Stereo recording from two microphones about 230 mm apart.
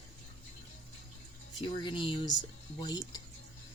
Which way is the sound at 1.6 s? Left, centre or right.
Centre.